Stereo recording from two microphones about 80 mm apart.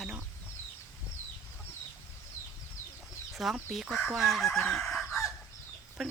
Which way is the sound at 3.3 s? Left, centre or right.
Centre.